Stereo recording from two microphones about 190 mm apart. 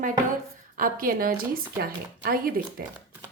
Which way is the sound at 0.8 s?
50° right (ahead or behind).